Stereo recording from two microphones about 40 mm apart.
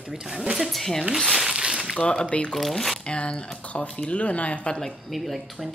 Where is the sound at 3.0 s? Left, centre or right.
Left.